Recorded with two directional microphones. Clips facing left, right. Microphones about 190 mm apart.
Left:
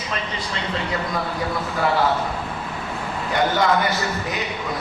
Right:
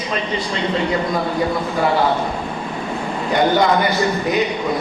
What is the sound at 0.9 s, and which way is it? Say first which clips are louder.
A man's voice: right 6 dB; 20° right (ahead or behind).